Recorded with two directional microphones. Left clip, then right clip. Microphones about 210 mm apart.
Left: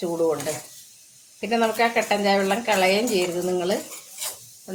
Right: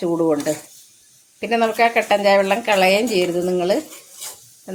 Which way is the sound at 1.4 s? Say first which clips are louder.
Right 4 dB; 45° right (ahead or behind).